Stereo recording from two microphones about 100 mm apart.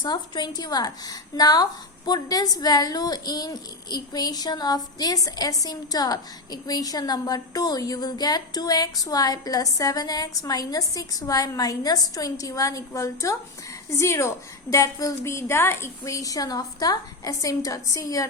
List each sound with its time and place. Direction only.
0.0 s a woman's voice: 45° left (ahead or behind)